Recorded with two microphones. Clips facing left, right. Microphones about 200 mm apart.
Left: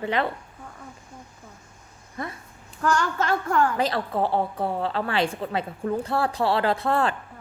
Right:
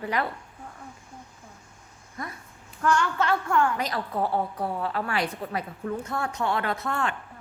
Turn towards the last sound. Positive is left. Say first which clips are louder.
# left 6 dB
turn(degrees=35)  # may be behind; listen again after turning